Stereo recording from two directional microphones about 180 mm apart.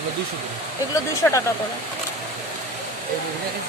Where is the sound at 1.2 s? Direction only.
15° left (ahead or behind).